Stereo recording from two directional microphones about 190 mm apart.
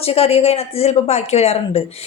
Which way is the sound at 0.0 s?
30° left (ahead or behind).